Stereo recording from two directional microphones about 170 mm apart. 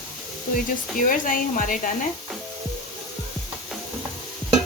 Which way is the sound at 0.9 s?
50° left (ahead or behind).